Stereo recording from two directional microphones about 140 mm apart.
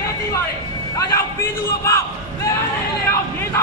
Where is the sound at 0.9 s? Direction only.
25° left (ahead or behind).